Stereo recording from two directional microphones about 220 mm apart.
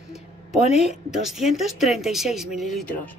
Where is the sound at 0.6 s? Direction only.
30° left (ahead or behind).